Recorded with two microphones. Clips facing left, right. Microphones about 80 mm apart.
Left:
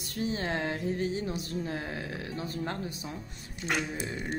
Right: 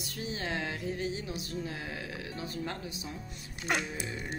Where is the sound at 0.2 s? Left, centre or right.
Left.